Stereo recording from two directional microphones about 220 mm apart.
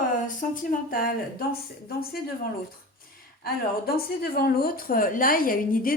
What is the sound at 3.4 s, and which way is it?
A woman's voice, 45° left (ahead or behind).